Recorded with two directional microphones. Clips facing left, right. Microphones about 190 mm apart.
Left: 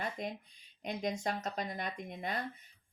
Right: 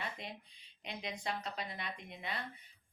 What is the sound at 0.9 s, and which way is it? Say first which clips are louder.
Speech: left 6 dB; 45° left (ahead or behind).